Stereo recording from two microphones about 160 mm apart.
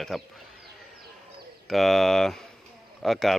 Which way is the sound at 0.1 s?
Centre (ahead or behind).